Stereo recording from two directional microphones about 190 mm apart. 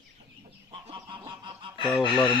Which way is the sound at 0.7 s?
25° right (ahead or behind).